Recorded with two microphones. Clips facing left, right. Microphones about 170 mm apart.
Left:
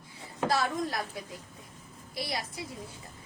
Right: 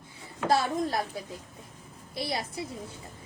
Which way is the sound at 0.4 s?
30° right (ahead or behind).